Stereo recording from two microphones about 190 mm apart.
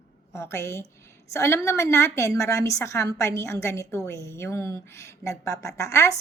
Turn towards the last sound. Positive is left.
turn(degrees=15)  # may be behind; listen again after turning